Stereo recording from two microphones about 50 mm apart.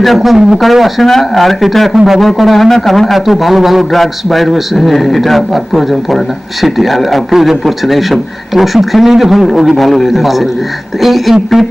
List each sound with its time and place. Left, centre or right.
0.0 s a man's voice: centre